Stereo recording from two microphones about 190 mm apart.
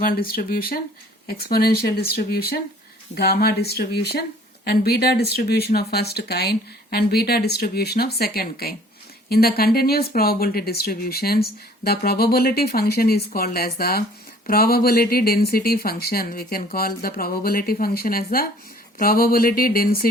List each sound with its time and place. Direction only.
0.0 s speech: 50° left (ahead or behind)